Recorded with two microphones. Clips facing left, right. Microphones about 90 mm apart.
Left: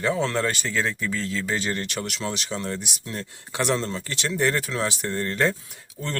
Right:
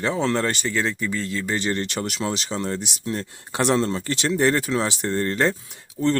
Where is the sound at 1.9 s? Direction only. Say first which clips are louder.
Right 3 dB; 35° right (ahead or behind).